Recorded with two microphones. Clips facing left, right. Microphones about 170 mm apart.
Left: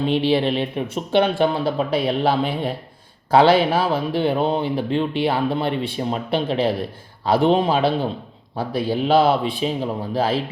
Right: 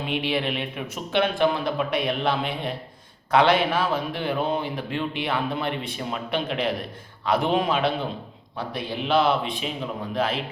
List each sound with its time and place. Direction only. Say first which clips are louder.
0.0 s speech: left 7 dB; 30° left (ahead or behind)